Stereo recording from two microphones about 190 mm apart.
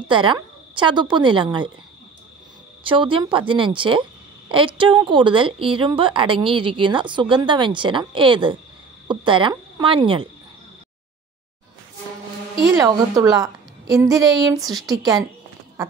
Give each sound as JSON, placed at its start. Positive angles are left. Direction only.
{"t": 0.1, "sound": "a woman's voice", "side_deg": -25}
{"t": 2.8, "sound": "a woman's voice", "side_deg": -25}
{"t": 12.7, "sound": "a woman's voice", "side_deg": -20}